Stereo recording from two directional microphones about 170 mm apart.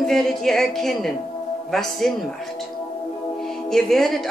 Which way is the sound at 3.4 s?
Centre (ahead or behind).